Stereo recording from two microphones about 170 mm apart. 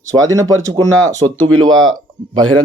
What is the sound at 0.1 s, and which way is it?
Speech, 20° right (ahead or behind).